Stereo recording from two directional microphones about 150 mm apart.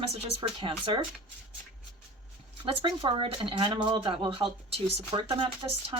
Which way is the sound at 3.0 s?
35° right (ahead or behind).